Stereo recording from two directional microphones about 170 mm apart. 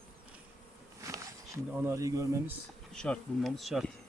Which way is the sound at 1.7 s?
15° right (ahead or behind).